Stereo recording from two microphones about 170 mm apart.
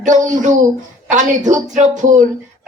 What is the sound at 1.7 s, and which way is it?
Speech, 45° right (ahead or behind).